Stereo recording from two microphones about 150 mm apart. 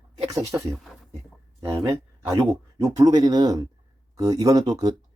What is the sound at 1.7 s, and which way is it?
Speech, 20° right (ahead or behind).